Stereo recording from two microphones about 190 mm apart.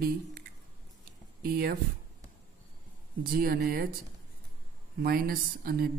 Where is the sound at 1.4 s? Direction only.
55° right (ahead or behind).